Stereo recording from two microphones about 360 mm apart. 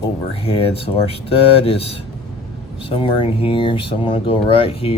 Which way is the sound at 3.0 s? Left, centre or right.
Centre.